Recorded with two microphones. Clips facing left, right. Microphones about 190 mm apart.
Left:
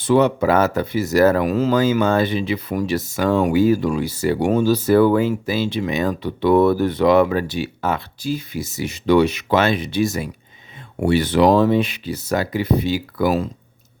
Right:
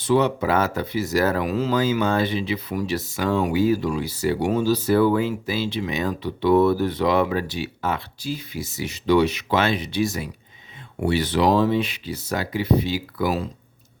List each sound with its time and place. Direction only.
0.0 s speech: 50° left (ahead or behind)